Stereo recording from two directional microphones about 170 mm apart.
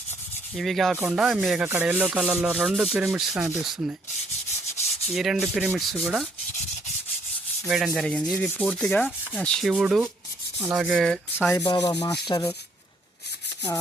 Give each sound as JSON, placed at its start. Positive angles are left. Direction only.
{"t": 0.5, "sound": "sanding", "side_deg": 0}
{"t": 5.0, "sound": "sanding", "side_deg": 0}
{"t": 7.9, "sound": "sanding", "side_deg": 0}
{"t": 11.5, "sound": "rub", "side_deg": 20}